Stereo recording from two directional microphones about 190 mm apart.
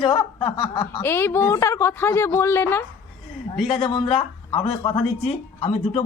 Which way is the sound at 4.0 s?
25° left (ahead or behind).